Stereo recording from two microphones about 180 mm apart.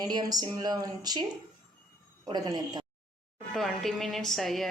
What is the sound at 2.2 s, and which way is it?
Speech, 20° right (ahead or behind).